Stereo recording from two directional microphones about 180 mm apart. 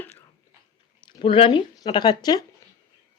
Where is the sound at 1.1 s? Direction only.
30° left (ahead or behind).